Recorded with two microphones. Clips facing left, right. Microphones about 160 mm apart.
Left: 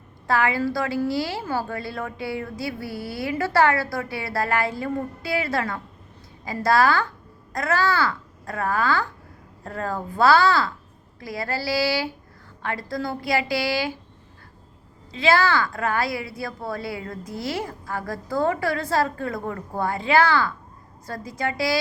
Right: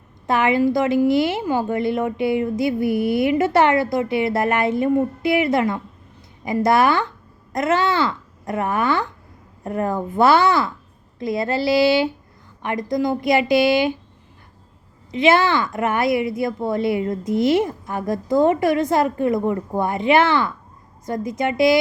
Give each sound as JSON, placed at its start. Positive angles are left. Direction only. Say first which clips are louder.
{"t": 0.3, "sound": "a woman's voice", "louder": "right 5 dB", "side_deg": -20}
{"t": 15.1, "sound": "a woman's voice", "louder": "right 4 dB", "side_deg": -20}